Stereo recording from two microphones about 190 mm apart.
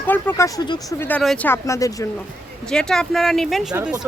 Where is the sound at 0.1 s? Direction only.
15° left (ahead or behind).